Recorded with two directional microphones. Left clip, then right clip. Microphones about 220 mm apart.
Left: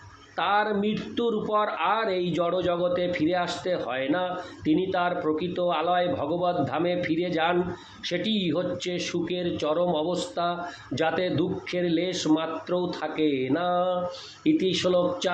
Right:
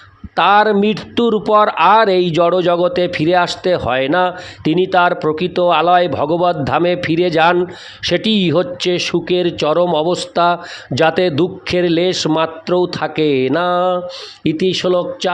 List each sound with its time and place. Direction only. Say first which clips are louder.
0.3 s speech: right 13 dB; 50° right (ahead or behind)